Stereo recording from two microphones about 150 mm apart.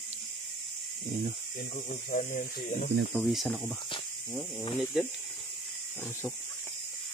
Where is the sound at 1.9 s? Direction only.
60° left (ahead or behind).